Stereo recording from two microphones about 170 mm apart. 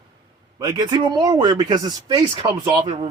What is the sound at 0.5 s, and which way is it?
Speech, 20° right (ahead or behind).